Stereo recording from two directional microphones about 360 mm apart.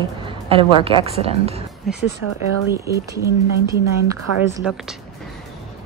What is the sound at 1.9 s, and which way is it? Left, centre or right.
Speech, centre.